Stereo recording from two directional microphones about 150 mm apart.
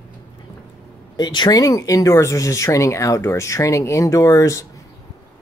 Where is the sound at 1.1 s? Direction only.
30° left (ahead or behind).